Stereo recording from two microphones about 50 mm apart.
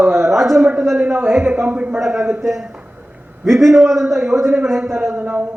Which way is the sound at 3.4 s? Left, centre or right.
Centre.